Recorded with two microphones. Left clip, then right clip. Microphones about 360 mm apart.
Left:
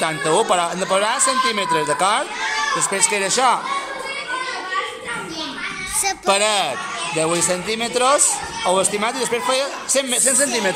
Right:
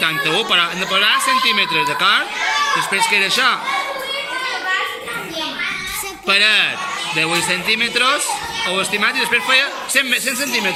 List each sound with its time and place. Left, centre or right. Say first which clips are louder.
0.0 s a man's voice: right 1 dB; centre
1.1 s speech: right 4 dB; left
1.8 s a man's voice: right 3 dB; centre
6.2 s a man's voice: right 5 dB; centre